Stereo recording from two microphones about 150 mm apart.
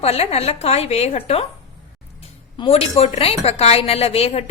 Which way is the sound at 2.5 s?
40° left (ahead or behind).